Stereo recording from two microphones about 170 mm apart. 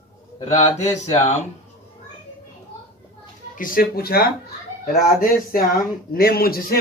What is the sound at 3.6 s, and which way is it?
A man's voice, 55° left (ahead or behind).